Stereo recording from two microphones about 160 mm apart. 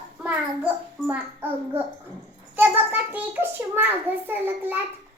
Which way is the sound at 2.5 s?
10° right (ahead or behind).